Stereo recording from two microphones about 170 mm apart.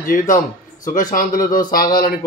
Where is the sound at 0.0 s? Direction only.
55° left (ahead or behind).